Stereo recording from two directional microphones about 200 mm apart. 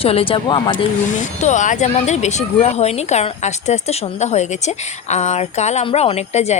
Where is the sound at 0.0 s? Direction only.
30° left (ahead or behind).